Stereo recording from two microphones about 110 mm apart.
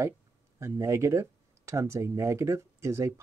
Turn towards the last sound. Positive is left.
turn(degrees=-25)  # may be behind; listen again after turning